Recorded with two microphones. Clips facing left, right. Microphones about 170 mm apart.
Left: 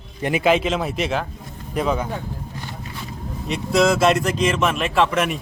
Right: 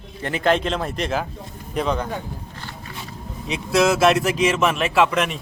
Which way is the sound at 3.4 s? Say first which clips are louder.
Left 1 dB; centre (ahead or behind).